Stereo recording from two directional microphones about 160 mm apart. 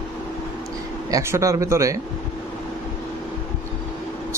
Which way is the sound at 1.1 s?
20° right (ahead or behind).